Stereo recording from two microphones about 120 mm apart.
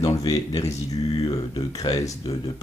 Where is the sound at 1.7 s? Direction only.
30° left (ahead or behind).